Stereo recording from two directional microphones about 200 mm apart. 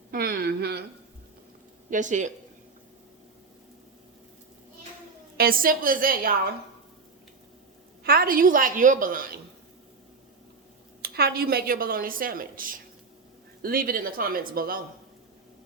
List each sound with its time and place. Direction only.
0.1 s a sound: 50° right (ahead or behind)
1.9 s speech: 40° right (ahead or behind)
5.4 s a woman's voice: 45° right (ahead or behind)
8.0 s a woman's voice: 45° right (ahead or behind)
11.0 s a woman's voice: 50° right (ahead or behind)